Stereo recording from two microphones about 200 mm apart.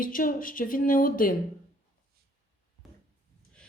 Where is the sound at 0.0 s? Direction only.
45° left (ahead or behind).